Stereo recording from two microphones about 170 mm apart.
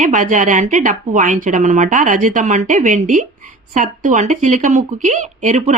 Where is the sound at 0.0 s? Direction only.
50° right (ahead or behind).